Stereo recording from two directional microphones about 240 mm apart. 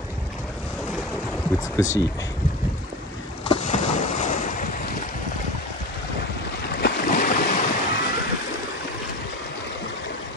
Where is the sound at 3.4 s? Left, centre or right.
Left.